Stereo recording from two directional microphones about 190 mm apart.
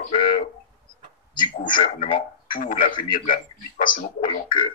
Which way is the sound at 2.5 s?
45° left (ahead or behind).